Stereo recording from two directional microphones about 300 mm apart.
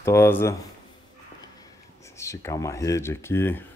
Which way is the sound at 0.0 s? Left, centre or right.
Centre.